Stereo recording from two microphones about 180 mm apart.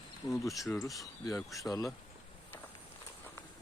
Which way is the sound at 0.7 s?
15° left (ahead or behind).